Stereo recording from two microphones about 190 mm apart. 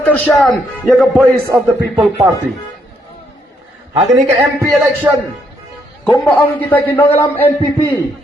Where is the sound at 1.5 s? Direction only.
15° right (ahead or behind).